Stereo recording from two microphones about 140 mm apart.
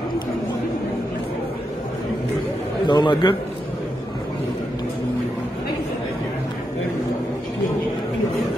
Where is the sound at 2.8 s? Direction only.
35° left (ahead or behind).